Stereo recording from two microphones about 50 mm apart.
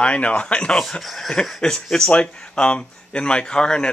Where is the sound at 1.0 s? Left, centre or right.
Centre.